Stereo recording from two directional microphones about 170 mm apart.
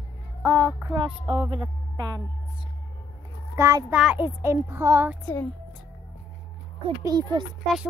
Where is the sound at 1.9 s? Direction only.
25° right (ahead or behind).